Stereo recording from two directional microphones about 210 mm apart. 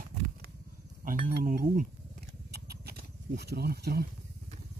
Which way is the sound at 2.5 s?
50° right (ahead or behind).